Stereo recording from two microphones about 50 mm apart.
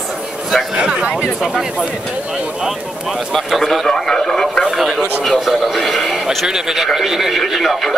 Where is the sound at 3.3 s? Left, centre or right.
Centre.